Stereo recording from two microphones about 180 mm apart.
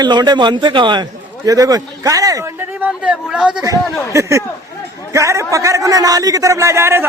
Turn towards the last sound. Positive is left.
turn(degrees=-15)  # may be behind; listen again after turning